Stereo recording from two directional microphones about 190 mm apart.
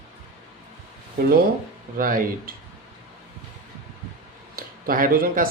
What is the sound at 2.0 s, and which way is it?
Speech, 45° right (ahead or behind).